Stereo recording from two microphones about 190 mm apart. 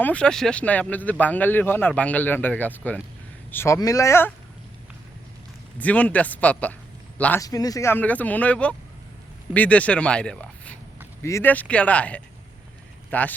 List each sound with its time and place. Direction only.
0.0 s speech: 5° left (ahead or behind)
5.8 s speech: 5° left (ahead or behind)
7.4 s speech: 20° left (ahead or behind)